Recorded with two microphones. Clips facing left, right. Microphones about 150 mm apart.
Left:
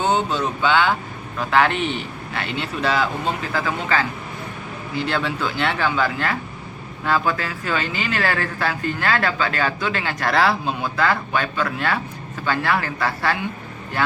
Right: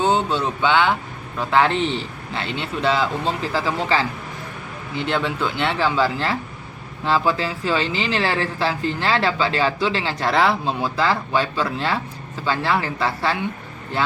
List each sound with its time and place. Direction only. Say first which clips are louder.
0.0 s speech: right 1 dB; 30° right (ahead or behind)